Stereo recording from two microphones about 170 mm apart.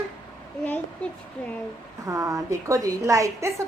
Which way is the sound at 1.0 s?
5° left (ahead or behind).